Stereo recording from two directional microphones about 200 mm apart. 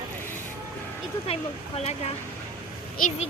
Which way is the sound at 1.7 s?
30° left (ahead or behind).